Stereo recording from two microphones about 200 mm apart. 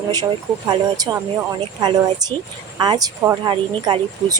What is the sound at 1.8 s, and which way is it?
Speech, 20° right (ahead or behind).